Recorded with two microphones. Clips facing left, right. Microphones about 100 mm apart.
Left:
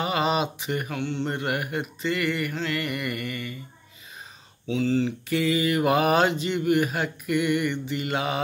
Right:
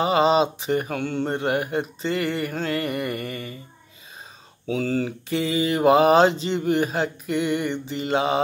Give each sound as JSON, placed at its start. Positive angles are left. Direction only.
{"t": 0.0, "sound": "speech", "side_deg": -30}
{"t": 1.3, "sound": "speech", "side_deg": -30}
{"t": 4.6, "sound": "speech", "side_deg": -45}
{"t": 5.3, "sound": "a sound", "side_deg": -30}